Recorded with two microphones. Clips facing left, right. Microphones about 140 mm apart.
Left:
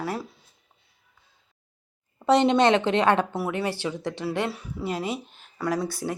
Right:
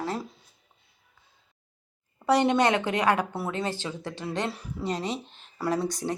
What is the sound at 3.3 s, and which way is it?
Speech, 10° left (ahead or behind).